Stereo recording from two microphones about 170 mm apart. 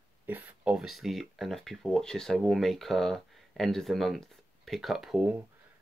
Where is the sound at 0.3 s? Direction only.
10° right (ahead or behind).